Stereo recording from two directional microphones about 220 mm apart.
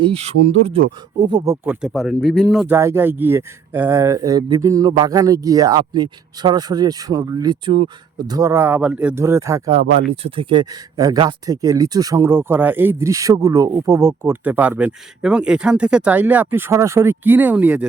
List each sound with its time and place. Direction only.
0.0 s speech: 25° right (ahead or behind)
1.3 s speech: 15° right (ahead or behind)
2.7 s speech: 10° right (ahead or behind)
9.8 s speech: 55° right (ahead or behind)
10.2 s speech: 25° right (ahead or behind); by 17.8 s 5° right (ahead or behind)